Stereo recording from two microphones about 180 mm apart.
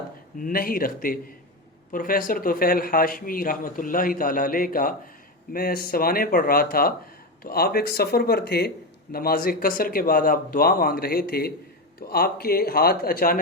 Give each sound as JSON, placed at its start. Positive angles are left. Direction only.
{"t": 0.3, "sound": "a man's voice", "side_deg": 50}